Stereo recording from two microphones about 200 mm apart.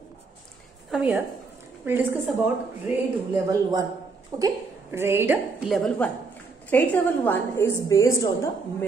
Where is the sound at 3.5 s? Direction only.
20° right (ahead or behind).